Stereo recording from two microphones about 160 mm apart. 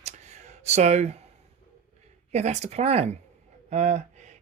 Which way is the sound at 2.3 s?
45° right (ahead or behind).